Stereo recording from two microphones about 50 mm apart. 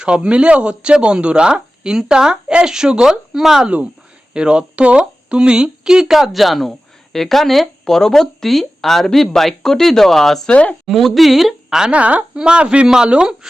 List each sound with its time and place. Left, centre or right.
0.0 s speech: right; by 10.5 s centre
10.5 s speech: left
10.8 s a woman's voice: centre
11.8 s speech: right